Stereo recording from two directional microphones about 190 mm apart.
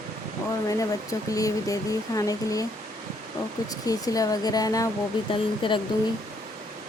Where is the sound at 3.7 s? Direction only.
20° left (ahead or behind).